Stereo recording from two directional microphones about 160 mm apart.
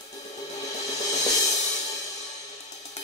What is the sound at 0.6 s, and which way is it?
Music, 45° left (ahead or behind).